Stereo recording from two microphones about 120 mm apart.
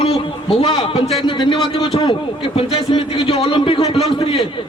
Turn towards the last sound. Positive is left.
turn(degrees=45)  # may be behind; listen again after turning